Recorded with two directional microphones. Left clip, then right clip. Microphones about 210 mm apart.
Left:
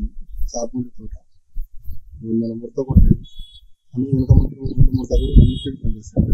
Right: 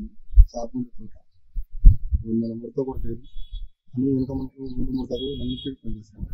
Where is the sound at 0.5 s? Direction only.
10° left (ahead or behind).